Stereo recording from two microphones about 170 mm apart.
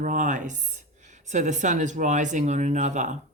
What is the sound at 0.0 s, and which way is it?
Speech, 50° right (ahead or behind).